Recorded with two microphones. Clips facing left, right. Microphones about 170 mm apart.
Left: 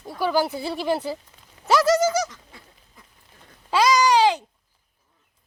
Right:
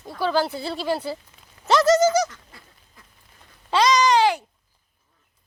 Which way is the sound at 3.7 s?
5° left (ahead or behind).